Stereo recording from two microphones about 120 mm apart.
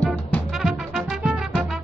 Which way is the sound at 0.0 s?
10° left (ahead or behind).